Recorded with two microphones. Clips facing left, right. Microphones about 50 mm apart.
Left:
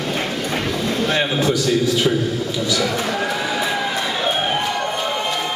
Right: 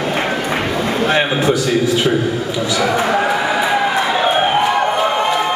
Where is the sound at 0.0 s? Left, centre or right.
Right.